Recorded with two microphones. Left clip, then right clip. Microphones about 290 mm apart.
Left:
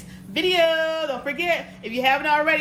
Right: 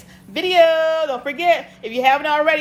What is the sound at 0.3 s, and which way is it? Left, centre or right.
A woman's voice, right.